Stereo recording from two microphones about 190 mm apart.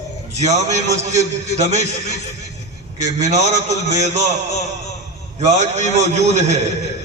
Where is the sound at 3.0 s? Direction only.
40° right (ahead or behind).